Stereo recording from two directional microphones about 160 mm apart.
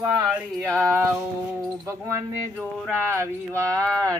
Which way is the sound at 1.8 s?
15° right (ahead or behind).